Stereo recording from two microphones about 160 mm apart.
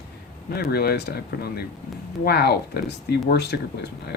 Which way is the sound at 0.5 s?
75° left (ahead or behind).